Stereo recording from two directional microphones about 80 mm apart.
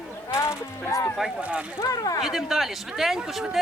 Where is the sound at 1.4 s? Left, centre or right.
Centre.